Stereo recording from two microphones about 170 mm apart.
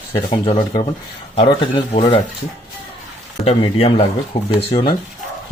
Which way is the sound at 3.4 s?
35° left (ahead or behind).